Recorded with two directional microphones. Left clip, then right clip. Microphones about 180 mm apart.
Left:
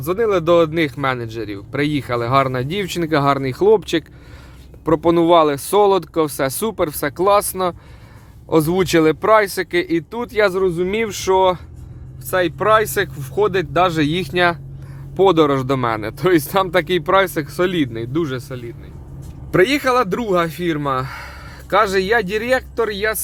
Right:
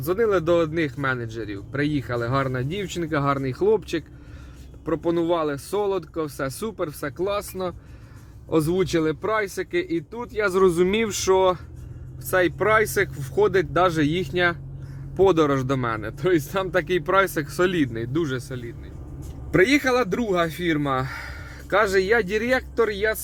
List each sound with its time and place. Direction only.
0.0 s speech: 15° left (ahead or behind); by 7.8 s 40° left (ahead or behind)
8.4 s speech: 20° left (ahead or behind)
8.8 s speech: 35° left (ahead or behind)
10.5 s speech: 15° right (ahead or behind)
10.8 s a man's voice: 5° left (ahead or behind)